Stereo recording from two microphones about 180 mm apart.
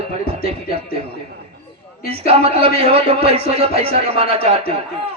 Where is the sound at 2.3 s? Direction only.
35° right (ahead or behind).